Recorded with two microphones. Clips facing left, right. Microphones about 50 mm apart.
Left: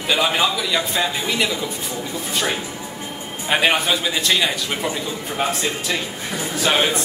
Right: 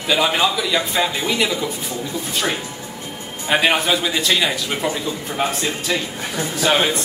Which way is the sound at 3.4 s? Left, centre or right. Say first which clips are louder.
Right 1 dB; centre.